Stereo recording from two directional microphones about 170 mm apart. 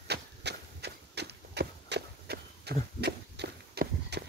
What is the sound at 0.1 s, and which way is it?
Horse, 80° right.